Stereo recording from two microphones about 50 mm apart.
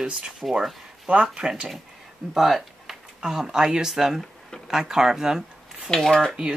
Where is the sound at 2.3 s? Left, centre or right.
Centre.